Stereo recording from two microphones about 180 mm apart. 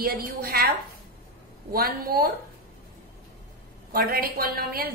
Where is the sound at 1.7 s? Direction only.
55° right (ahead or behind).